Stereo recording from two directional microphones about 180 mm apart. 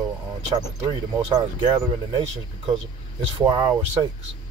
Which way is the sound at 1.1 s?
20° right (ahead or behind).